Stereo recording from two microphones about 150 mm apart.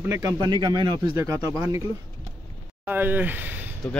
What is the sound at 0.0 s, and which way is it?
Speech, 20° right (ahead or behind).